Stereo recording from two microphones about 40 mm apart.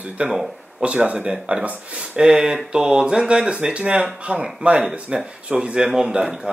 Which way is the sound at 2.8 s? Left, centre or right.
Right.